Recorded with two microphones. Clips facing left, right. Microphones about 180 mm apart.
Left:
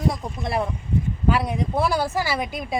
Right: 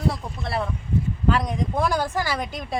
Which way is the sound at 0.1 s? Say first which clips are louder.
Left 2 dB; 15° left (ahead or behind).